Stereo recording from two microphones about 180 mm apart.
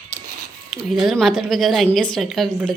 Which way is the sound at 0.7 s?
Centre (ahead or behind).